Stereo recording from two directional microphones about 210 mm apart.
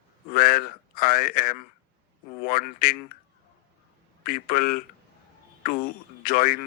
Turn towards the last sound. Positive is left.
turn(degrees=45)  # may be behind; listen again after turning